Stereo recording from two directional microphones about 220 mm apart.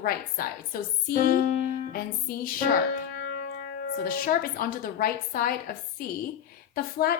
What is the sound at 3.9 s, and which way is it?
A woman's voice, 40° left (ahead or behind).